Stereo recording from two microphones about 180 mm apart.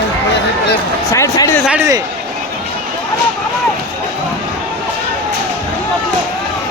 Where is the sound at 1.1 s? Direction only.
20° left (ahead or behind).